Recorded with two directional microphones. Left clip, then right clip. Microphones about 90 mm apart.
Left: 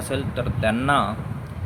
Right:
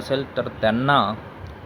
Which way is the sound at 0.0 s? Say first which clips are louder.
Right 3 dB; 20° right (ahead or behind).